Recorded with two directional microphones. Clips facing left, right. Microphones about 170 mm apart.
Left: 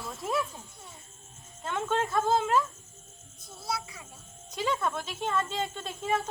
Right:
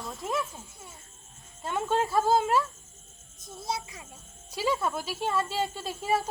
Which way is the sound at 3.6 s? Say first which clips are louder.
Right 1 dB; 20° right (ahead or behind).